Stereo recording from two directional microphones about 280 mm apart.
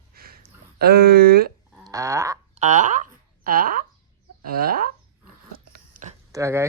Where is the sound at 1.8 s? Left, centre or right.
Centre.